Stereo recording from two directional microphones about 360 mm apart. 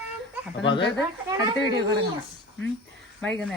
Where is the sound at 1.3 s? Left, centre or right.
Centre.